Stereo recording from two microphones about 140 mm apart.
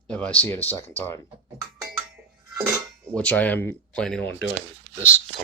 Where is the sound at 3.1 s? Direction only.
10° left (ahead or behind).